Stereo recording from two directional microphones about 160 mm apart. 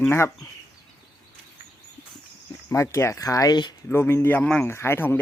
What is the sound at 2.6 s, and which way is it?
Speech, 15° left (ahead or behind).